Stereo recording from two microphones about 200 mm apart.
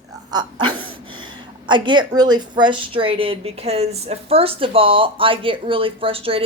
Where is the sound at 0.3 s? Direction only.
20° right (ahead or behind).